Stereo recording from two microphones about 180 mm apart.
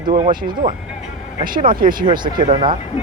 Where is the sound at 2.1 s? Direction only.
25° right (ahead or behind).